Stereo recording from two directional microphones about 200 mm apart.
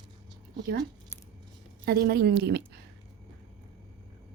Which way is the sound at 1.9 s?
50° right (ahead or behind).